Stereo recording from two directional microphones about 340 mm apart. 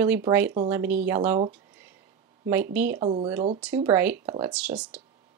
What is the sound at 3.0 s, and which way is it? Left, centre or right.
Speech, centre.